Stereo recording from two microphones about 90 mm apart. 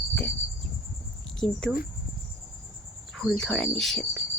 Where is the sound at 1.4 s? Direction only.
5° left (ahead or behind).